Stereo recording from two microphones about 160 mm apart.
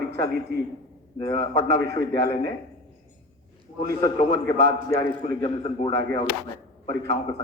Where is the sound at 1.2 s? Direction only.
30° left (ahead or behind).